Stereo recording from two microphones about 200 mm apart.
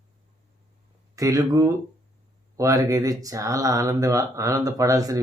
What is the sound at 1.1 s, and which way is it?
Speech, 15° right (ahead or behind).